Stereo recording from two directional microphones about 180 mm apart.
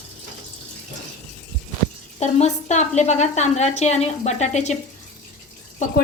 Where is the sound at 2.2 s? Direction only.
40° left (ahead or behind).